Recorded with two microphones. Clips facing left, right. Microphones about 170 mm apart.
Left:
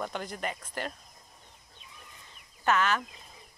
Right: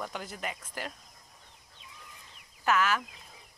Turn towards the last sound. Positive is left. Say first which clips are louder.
# left 1 dB
turn(degrees=-5)  # may be behind; listen again after turning